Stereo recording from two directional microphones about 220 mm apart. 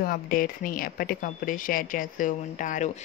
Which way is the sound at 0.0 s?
40° left (ahead or behind).